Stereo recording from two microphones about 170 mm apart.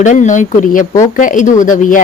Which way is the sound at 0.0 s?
45° left (ahead or behind).